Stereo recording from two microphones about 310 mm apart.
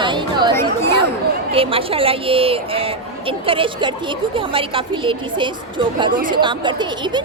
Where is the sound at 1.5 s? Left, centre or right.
Centre.